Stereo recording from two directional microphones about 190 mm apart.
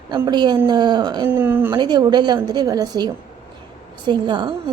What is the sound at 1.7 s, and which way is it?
A woman's voice, 25° right (ahead or behind).